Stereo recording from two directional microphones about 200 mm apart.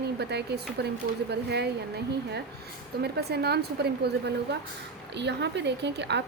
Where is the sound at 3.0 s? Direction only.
55° right (ahead or behind).